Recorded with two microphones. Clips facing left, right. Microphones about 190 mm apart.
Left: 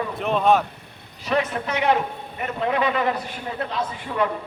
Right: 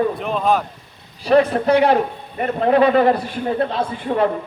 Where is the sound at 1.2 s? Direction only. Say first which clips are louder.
Right 9 dB; 35° right (ahead or behind).